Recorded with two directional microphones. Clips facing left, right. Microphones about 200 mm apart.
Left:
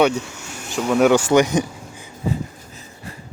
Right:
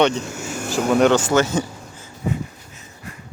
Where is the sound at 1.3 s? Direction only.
15° left (ahead or behind).